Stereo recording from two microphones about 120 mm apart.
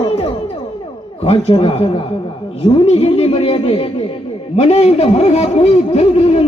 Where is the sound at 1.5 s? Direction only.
55° left (ahead or behind).